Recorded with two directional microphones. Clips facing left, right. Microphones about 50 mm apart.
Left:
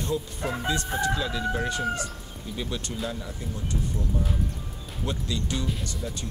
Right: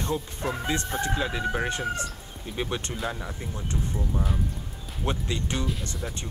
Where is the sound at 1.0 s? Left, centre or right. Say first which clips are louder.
Left 1 dB; right.